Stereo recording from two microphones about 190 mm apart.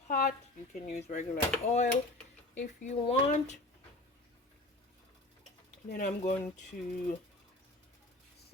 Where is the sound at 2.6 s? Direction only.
35° left (ahead or behind).